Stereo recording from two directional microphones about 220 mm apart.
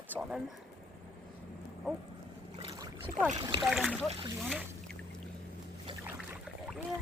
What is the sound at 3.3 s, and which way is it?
Speech, 20° right (ahead or behind).